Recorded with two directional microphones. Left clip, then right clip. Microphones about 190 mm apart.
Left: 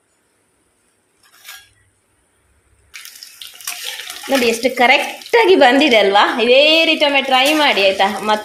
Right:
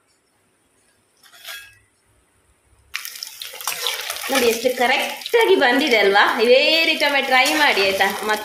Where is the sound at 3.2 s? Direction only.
15° left (ahead or behind).